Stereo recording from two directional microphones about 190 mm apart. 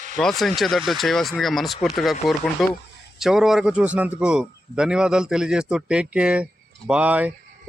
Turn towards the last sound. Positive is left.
turn(degrees=-10)  # may be behind; listen again after turning